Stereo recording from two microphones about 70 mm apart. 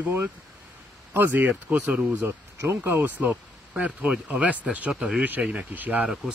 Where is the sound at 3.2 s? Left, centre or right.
Right.